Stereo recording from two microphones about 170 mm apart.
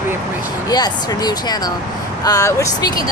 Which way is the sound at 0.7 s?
25° left (ahead or behind).